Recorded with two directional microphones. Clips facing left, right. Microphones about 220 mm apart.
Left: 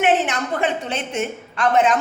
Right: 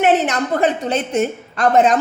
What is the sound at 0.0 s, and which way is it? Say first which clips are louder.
A woman's voice: right 3 dB; 40° right (ahead or behind).